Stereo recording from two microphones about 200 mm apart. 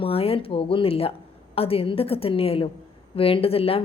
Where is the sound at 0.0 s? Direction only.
30° left (ahead or behind).